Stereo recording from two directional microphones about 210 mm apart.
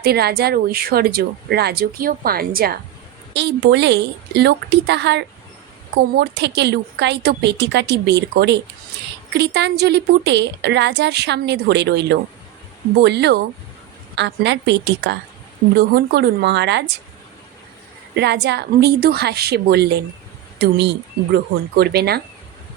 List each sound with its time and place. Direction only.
0.0 s a woman's voice: 50° right (ahead or behind)
18.1 s a woman's voice: 55° right (ahead or behind)